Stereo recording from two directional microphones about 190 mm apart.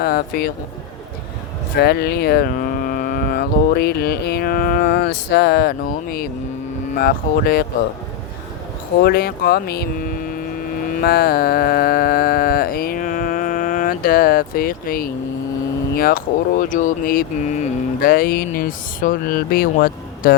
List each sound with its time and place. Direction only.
0.0 s speech: 50° left (ahead or behind)
1.8 s speech: 60° left (ahead or behind)
9.0 s speech: 50° left (ahead or behind)
11.0 s a sound: 55° left (ahead or behind)
16.0 s speech: 50° left (ahead or behind)